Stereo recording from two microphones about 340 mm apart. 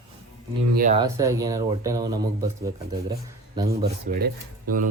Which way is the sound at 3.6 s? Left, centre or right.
Right.